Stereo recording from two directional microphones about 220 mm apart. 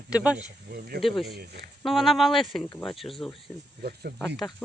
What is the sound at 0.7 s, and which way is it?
Speech, 45° right (ahead or behind).